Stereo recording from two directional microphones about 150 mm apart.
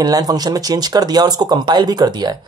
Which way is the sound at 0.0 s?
25° right (ahead or behind).